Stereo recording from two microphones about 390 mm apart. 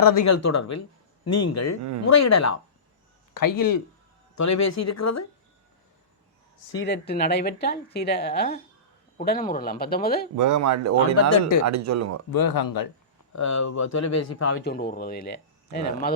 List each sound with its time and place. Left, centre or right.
0.0 s speech: left
3.3 s speech: left
4.4 s speech: left
6.7 s speech: left
10.3 s speech: right
11.3 s speech: left
11.6 s speech: right
12.3 s speech: left
13.3 s speech: left
14.6 s speech: left